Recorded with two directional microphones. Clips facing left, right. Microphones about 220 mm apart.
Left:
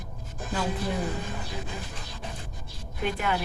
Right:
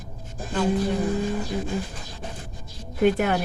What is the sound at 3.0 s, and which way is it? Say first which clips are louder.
Speech: right 9 dB; 50° right (ahead or behind).